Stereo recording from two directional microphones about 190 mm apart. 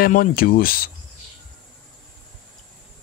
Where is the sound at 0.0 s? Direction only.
50° left (ahead or behind).